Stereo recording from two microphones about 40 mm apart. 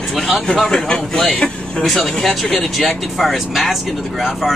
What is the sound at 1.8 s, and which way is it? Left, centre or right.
Speech, centre.